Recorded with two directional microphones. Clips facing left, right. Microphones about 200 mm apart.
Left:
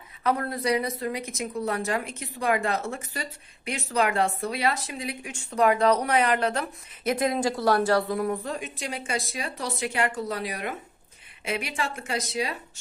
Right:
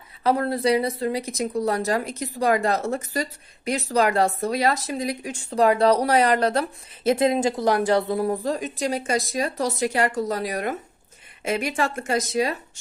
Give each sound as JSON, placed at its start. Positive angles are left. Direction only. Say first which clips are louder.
{"t": 0.2, "sound": "speech", "louder": "right 5 dB", "side_deg": -30}
{"t": 8.0, "sound": "a woman's voice", "louder": "right 4 dB", "side_deg": -30}